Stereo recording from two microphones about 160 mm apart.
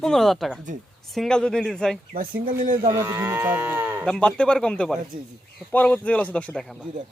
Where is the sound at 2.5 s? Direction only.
55° right (ahead or behind).